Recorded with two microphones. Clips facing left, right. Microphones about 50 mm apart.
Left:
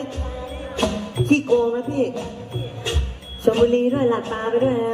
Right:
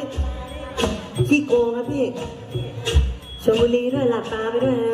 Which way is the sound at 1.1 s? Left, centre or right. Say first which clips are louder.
Even; left.